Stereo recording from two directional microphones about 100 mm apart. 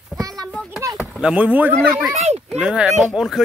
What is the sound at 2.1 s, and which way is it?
Speech, 90° right.